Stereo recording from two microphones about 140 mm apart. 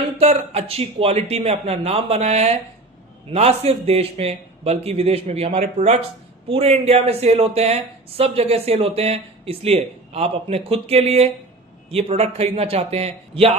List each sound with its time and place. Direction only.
0.2 s speech: 45° right (ahead or behind)